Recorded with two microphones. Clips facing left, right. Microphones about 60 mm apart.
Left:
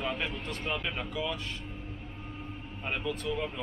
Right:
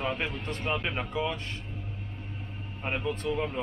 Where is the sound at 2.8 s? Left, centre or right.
Right.